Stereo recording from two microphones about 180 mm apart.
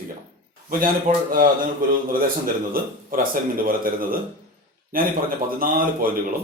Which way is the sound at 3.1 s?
50° right (ahead or behind).